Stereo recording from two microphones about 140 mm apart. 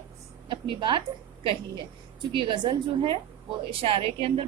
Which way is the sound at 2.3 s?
35° right (ahead or behind).